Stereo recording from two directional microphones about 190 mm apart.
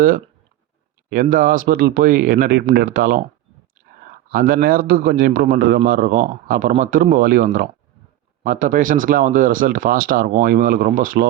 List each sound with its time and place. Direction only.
1.1 s a man's voice: 45° right (ahead or behind)
4.3 s a man's voice: 50° right (ahead or behind)
8.4 s a man's voice: 45° right (ahead or behind)